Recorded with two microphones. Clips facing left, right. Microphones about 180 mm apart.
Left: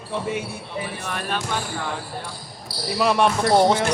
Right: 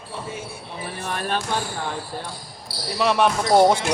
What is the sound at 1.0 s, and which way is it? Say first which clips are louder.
Speech: right 6 dB; 35° right (ahead or behind).